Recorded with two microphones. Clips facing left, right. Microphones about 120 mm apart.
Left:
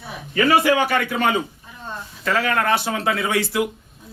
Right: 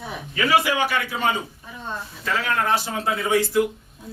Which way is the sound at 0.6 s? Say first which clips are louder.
Left 5 dB; 50° left (ahead or behind).